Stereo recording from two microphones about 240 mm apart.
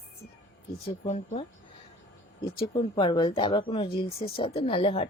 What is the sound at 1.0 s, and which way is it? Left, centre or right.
Speech, left.